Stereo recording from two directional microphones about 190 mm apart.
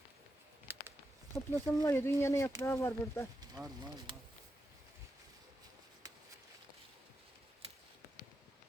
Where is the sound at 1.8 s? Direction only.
15° left (ahead or behind).